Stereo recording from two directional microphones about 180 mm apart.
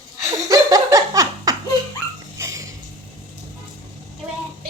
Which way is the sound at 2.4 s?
15° right (ahead or behind).